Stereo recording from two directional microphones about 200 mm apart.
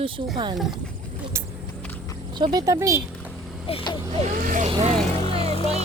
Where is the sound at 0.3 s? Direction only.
20° right (ahead or behind).